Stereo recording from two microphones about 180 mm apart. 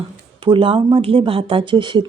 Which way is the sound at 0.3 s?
25° right (ahead or behind).